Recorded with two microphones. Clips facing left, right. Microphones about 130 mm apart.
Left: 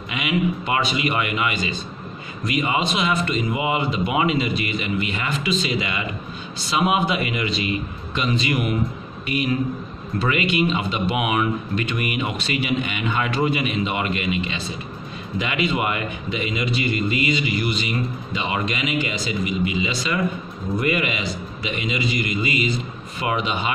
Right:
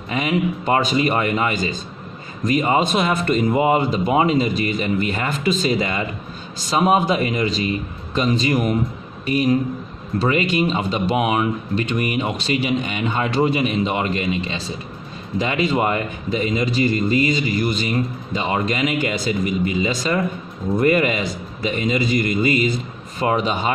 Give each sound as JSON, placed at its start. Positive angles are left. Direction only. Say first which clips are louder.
{"t": 0.1, "sound": "a man's voice", "louder": "right 2 dB", "side_deg": -40}